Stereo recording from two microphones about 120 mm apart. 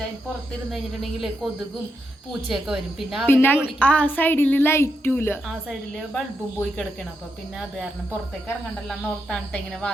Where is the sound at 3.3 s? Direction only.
20° left (ahead or behind).